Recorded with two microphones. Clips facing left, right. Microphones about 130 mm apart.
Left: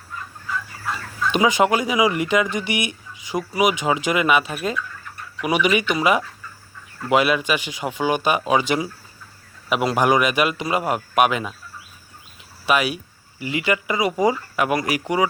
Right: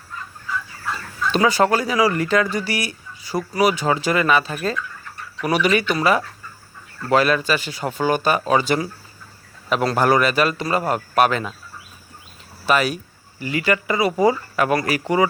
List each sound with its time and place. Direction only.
1.3 s a man's voice: 15° left (ahead or behind)
12.6 s a man's voice: 10° left (ahead or behind)